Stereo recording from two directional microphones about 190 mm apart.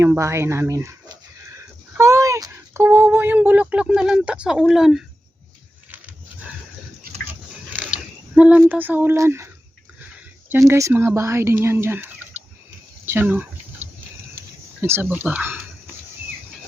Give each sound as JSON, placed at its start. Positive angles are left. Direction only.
{"t": 0.0, "sound": "speech", "side_deg": -15}
{"t": 7.1, "sound": "pig", "side_deg": -50}
{"t": 7.7, "sound": "mechanisms", "side_deg": -10}
{"t": 8.4, "sound": "speech", "side_deg": -5}
{"t": 10.5, "sound": "speech", "side_deg": -15}
{"t": 13.1, "sound": "a sound", "side_deg": -10}
{"t": 14.8, "sound": "speech", "side_deg": -10}